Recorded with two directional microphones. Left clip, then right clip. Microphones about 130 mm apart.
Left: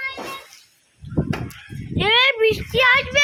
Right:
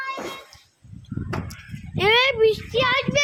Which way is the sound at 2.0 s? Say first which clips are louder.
Left 1 dB; 60° right (ahead or behind).